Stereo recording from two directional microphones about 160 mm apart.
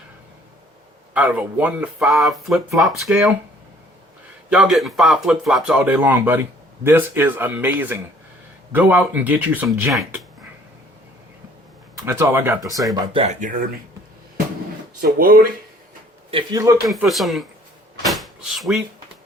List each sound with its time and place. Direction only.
1.1 s speech: 10° right (ahead or behind)
4.5 s speech: centre (ahead or behind)
12.0 s speech: 15° right (ahead or behind)
15.0 s speech: 65° right (ahead or behind)
16.3 s speech: 25° right (ahead or behind)
16.8 s speech: centre (ahead or behind)
18.0 s door: centre (ahead or behind)